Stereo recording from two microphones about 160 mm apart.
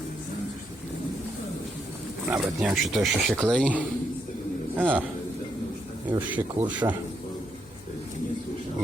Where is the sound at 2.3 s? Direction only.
10° right (ahead or behind).